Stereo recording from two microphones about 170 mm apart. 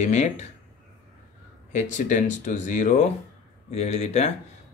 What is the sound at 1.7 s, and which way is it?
Speech, 45° left (ahead or behind).